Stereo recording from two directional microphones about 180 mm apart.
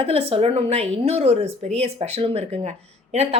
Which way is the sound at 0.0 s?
30° right (ahead or behind).